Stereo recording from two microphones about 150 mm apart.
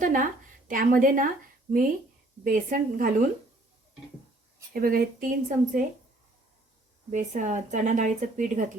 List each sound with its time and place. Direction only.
0.0 s a sound: 60° right (ahead or behind)
0.7 s speech: 65° right (ahead or behind)
2.4 s speech: 65° right (ahead or behind)
4.7 s speech: 75° right (ahead or behind)
7.1 s speech: 55° right (ahead or behind)